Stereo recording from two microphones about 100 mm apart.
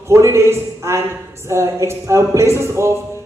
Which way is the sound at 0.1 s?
25° right (ahead or behind).